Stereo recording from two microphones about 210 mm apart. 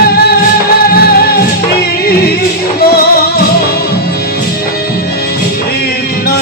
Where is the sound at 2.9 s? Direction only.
50° left (ahead or behind).